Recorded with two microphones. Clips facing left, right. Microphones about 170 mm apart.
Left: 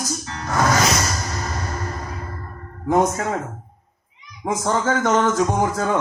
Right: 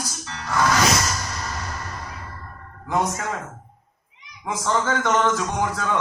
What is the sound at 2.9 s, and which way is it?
Speech, 45° left (ahead or behind).